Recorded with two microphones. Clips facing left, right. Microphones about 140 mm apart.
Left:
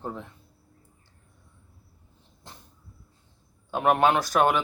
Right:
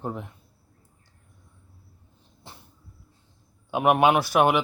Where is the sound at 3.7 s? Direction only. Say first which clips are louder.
Right 2 dB; 10° right (ahead or behind).